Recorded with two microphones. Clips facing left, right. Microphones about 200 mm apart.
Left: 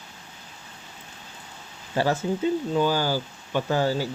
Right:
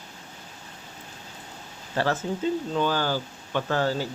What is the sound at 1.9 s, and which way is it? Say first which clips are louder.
Speech: left 2 dB; 10° left (ahead or behind).